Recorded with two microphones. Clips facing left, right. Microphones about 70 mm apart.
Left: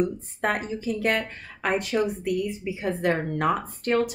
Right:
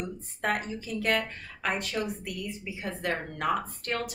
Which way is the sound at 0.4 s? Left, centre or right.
Left.